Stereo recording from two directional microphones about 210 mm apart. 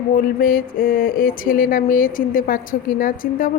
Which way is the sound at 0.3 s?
40° left (ahead or behind).